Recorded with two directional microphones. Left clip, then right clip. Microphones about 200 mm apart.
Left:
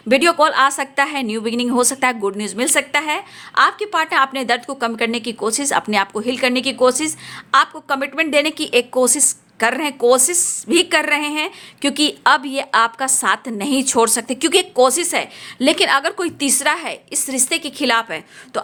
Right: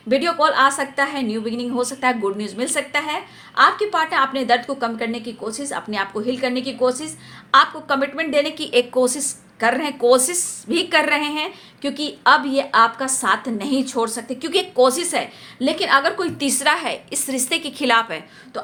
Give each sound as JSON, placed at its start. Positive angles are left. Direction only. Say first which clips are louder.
{"t": 0.1, "sound": "a woman's voice", "louder": "left 4 dB", "side_deg": 40}
{"t": 18.5, "sound": "a woman's voice", "louder": "left 6 dB", "side_deg": 45}